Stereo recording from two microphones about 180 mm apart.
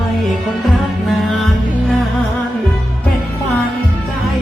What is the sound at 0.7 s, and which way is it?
Music, centre (ahead or behind).